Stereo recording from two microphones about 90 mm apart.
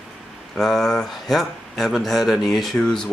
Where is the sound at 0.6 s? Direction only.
5° left (ahead or behind).